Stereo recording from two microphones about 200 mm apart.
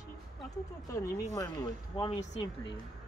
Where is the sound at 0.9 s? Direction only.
15° left (ahead or behind).